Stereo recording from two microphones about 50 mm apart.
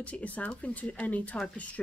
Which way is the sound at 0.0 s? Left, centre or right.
Left.